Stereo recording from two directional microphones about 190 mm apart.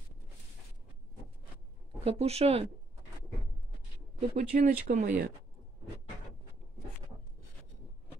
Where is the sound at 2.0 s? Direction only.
30° right (ahead or behind).